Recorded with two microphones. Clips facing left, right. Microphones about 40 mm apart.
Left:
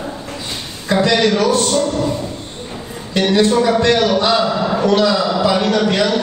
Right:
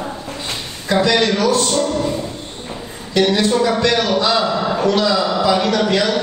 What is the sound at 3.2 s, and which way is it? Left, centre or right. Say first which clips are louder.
Speech: left 1 dB; left.